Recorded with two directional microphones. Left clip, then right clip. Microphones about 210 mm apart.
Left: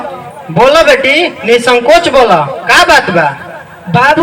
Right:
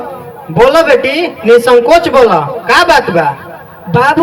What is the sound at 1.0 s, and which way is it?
A man's voice, 55° right (ahead or behind).